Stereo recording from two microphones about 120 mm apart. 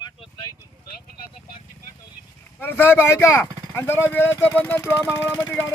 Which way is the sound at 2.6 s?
20° left (ahead or behind).